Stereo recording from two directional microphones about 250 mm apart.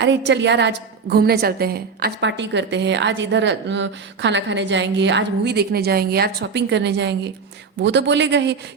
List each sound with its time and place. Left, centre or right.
0.0 s a woman's voice: right